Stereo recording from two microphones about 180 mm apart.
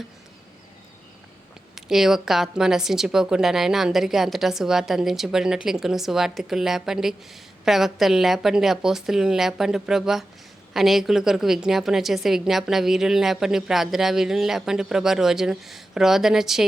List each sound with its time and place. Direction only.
1.7 s a woman's voice: centre (ahead or behind)